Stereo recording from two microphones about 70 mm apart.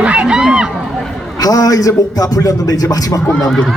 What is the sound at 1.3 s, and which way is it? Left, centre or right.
A man's voice, left.